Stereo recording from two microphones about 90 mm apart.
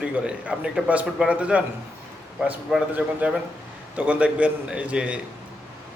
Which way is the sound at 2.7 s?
10° right (ahead or behind).